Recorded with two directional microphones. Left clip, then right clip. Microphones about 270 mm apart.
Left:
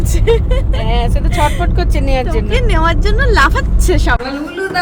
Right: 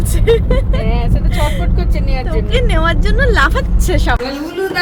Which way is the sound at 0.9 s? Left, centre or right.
Left.